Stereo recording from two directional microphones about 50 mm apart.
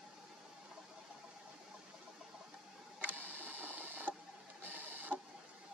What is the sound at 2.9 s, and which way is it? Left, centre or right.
Printer, right.